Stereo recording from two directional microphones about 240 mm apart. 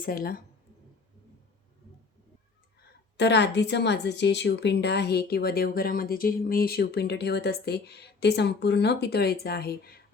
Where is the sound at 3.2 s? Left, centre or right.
Left.